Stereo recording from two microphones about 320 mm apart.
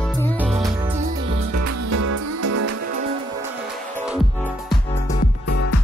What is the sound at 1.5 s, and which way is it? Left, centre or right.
Music, right.